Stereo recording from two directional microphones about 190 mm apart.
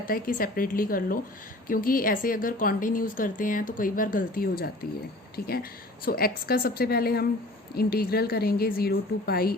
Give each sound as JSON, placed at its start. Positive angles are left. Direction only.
{"t": 0.0, "sound": "speech", "side_deg": 45}